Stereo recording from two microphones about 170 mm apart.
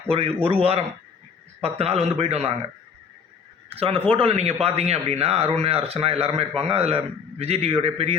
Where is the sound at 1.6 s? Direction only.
35° right (ahead or behind).